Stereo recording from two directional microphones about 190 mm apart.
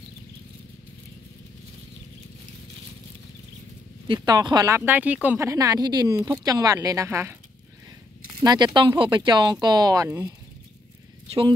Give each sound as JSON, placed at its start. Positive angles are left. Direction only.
{"t": 4.1, "sound": "speech", "side_deg": -20}
{"t": 8.4, "sound": "speech", "side_deg": -20}